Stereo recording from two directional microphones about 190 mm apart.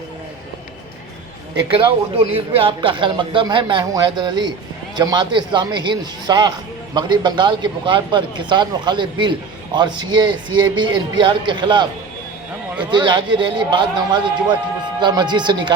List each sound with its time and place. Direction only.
2.3 s a man's voice: 30° right (ahead or behind)